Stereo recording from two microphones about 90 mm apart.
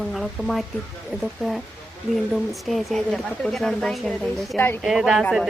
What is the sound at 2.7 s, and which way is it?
Speech, centre (ahead or behind).